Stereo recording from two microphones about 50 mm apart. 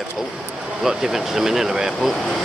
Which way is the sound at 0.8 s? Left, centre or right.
Centre.